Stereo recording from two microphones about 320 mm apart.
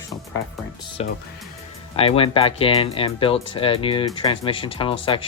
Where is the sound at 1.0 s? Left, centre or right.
Centre.